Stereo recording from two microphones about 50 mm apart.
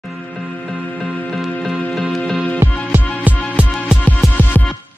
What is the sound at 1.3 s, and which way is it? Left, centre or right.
Music, centre.